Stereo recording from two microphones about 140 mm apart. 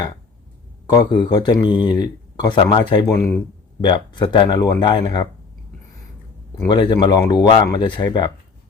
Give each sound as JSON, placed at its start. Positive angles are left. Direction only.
{"t": 0.9, "sound": "speech", "side_deg": 30}
{"t": 6.7, "sound": "speech", "side_deg": 30}